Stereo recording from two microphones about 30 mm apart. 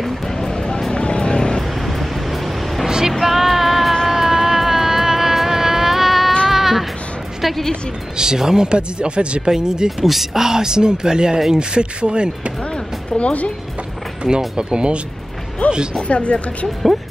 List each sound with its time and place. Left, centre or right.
0.4 s a sound: centre
0.9 s vehicle: left
1.9 s vehicle: centre
3.1 s music: centre
4.1 s vehicle: centre
6.5 s music: centre
8.2 s speech: centre
8.6 s speech: right
9.4 s speech: right
9.8 s speech: centre; by 12.5 s right
13.2 s speech: left
14.2 s speech: centre
14.6 s speech: right
15.6 s speech: left